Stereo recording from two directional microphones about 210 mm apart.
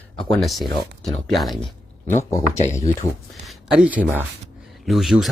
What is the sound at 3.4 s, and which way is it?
A man's voice, 5° right (ahead or behind).